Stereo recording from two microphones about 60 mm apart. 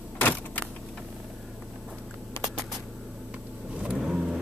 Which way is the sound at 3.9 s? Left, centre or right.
Centre.